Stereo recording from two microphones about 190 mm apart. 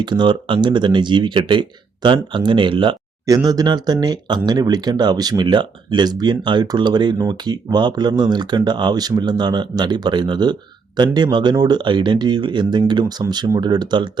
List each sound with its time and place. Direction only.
0.0 s speech: 25° right (ahead or behind)